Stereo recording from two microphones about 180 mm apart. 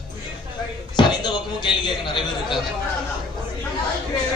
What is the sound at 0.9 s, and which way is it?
Speech, 25° left (ahead or behind).